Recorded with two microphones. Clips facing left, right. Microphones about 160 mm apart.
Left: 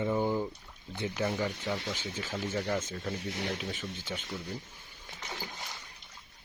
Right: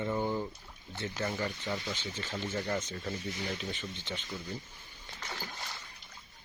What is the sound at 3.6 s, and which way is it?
Speech, 5° left (ahead or behind).